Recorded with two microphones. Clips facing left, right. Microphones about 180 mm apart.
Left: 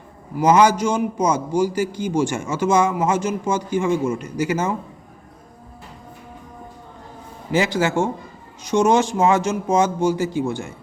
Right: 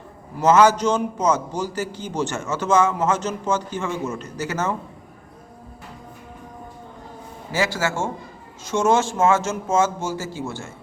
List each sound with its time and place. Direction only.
0.3 s a man's voice: 15° left (ahead or behind)
7.5 s a man's voice: 20° left (ahead or behind)